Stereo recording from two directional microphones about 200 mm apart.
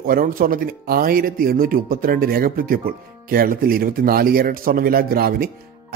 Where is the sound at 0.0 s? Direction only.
45° right (ahead or behind).